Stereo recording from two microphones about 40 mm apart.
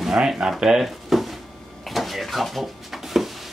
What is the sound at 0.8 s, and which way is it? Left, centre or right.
Drawer open or close, centre.